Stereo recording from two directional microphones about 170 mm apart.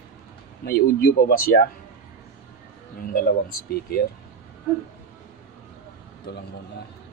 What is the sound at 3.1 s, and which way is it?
Speech, 60° left (ahead or behind).